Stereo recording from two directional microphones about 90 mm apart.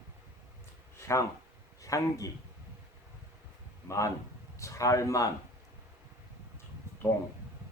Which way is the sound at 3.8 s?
35° left (ahead or behind).